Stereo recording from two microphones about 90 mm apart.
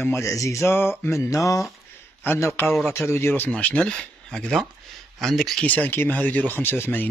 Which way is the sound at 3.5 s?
10° left (ahead or behind).